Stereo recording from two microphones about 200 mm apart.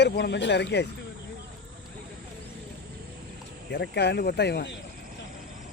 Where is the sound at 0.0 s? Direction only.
60° left (ahead or behind).